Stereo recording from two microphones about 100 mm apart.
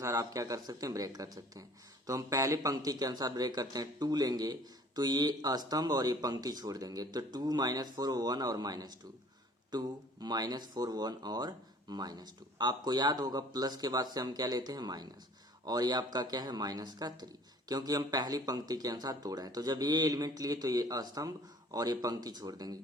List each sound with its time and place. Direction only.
0.0 s speech: 35° right (ahead or behind)